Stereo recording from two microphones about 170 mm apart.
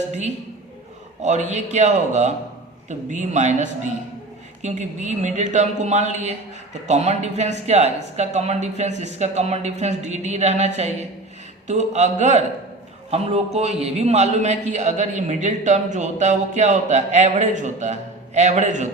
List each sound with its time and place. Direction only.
1.2 s a man's voice: 45° right (ahead or behind)